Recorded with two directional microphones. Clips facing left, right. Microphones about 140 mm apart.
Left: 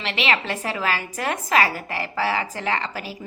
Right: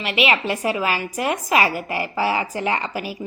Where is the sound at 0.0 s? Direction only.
15° right (ahead or behind).